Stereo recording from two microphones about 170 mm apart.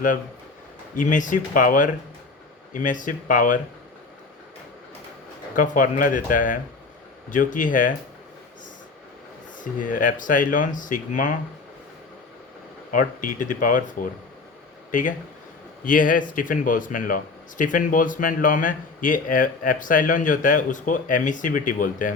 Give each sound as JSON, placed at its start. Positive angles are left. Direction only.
{"t": 0.9, "sound": "speech", "side_deg": 50}
{"t": 5.5, "sound": "speech", "side_deg": 50}
{"t": 9.6, "sound": "speech", "side_deg": 50}
{"t": 12.9, "sound": "speech", "side_deg": 50}
{"t": 15.8, "sound": "speech", "side_deg": 50}